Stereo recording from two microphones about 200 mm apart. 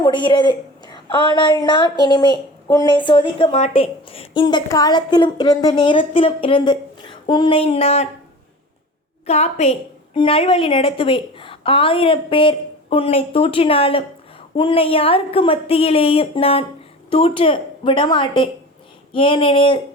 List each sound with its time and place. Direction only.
0.0 s a woman's voice: 25° left (ahead or behind)
9.2 s a woman's voice: 30° left (ahead or behind)